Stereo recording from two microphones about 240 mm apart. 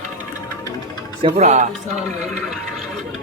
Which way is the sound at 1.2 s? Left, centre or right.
Right.